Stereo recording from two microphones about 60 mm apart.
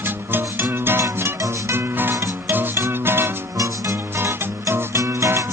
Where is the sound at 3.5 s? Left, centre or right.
Right.